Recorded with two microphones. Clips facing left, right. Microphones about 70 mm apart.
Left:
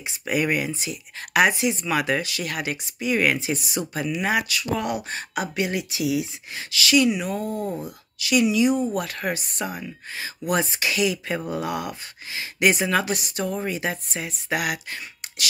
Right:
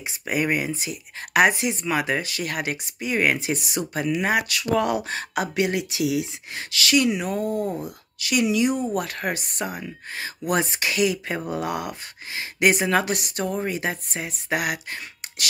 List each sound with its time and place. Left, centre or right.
0.0 s speech: right
1.9 s speech: right
3.3 s speech: right
3.9 s speech: right
4.7 s speech: right
13.5 s speech: right